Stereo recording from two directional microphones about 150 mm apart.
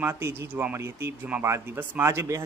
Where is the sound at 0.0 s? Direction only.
15° right (ahead or behind).